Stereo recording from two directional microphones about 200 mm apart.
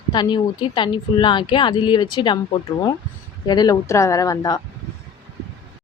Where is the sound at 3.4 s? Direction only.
20° left (ahead or behind).